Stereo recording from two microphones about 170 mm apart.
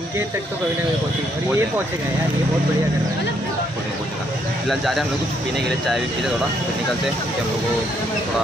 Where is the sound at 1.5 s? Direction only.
15° right (ahead or behind).